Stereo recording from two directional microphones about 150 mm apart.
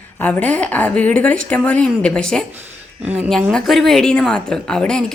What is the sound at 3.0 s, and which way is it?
Speech, 10° right (ahead or behind).